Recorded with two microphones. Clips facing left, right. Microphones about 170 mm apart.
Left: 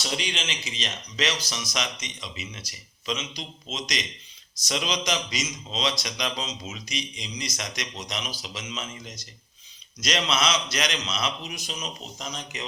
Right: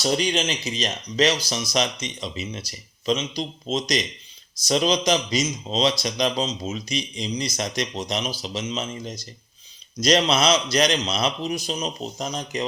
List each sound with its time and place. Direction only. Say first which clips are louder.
0.0 s speech: right 9 dB; 40° right (ahead or behind)